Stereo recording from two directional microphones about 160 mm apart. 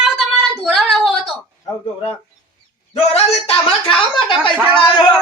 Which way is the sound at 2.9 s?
40° left (ahead or behind).